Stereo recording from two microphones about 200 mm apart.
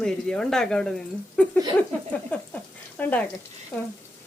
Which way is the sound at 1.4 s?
5° left (ahead or behind).